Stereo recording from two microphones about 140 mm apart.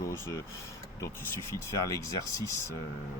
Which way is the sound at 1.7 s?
20° left (ahead or behind).